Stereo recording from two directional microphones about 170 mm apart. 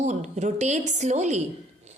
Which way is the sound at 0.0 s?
45° right (ahead or behind).